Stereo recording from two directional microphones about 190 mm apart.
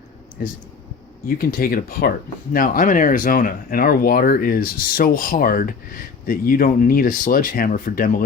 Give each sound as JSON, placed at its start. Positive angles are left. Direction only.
{"t": 0.4, "sound": "speech", "side_deg": 50}